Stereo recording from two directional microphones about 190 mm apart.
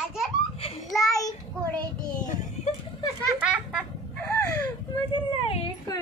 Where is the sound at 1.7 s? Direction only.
40° left (ahead or behind).